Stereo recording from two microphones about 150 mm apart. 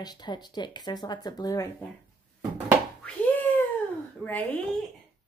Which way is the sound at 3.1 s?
10° left (ahead or behind).